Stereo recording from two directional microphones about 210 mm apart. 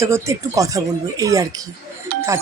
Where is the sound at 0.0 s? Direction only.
15° right (ahead or behind).